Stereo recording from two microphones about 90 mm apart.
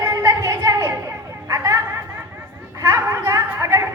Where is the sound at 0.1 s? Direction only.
40° right (ahead or behind).